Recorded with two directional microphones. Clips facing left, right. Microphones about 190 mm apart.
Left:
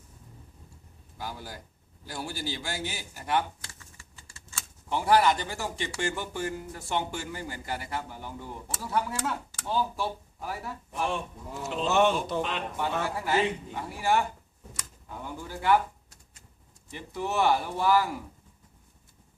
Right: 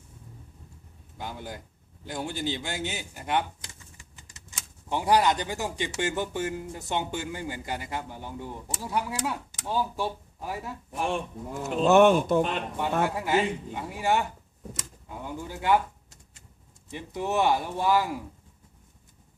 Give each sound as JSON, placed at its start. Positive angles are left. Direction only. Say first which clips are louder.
{"t": 1.2, "sound": "speech", "louder": "right 2 dB", "side_deg": -20}
{"t": 11.1, "sound": "speech", "louder": "right 3 dB", "side_deg": -50}
{"t": 13.1, "sound": "speech", "louder": "right 1 dB", "side_deg": -15}
{"t": 14.7, "sound": "a sound", "louder": "right 3 dB", "side_deg": -20}
{"t": 16.9, "sound": "speech", "louder": "right 3 dB", "side_deg": -20}